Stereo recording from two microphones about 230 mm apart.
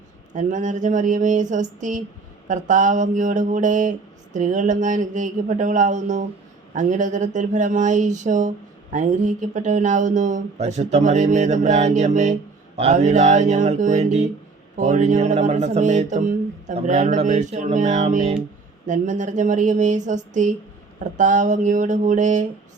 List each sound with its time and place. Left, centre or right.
0.3 s speech: right